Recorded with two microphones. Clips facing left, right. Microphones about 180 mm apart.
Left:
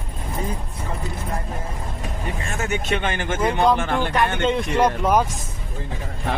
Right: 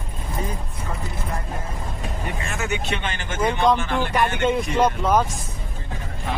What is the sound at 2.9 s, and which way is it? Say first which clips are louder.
Speech: left 5 dB; 50° left (ahead or behind).